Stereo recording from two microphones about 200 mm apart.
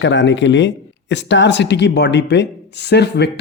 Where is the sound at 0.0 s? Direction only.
65° left (ahead or behind).